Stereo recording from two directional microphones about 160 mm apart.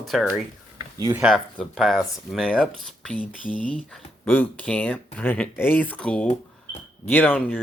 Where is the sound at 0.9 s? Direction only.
20° right (ahead or behind).